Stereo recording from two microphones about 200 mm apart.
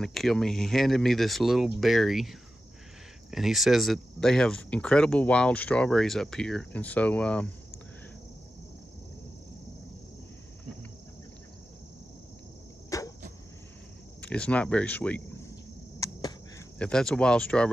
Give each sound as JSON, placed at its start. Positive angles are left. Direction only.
{"t": 0.0, "sound": "speech", "side_deg": 0}
{"t": 12.9, "sound": "cricket", "side_deg": 15}
{"t": 14.2, "sound": "speech", "side_deg": 5}
{"t": 16.0, "sound": "a sound", "side_deg": 15}
{"t": 16.7, "sound": "speech", "side_deg": 5}